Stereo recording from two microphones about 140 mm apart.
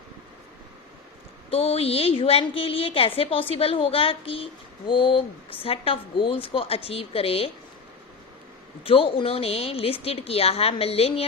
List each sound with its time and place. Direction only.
1.5 s a woman's voice: 45° left (ahead or behind)
8.8 s a woman's voice: 40° left (ahead or behind)